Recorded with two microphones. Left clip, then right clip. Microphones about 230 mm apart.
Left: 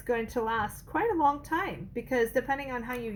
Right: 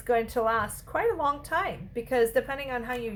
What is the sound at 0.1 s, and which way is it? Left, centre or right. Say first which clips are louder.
A woman's voice: right 4 dB; centre.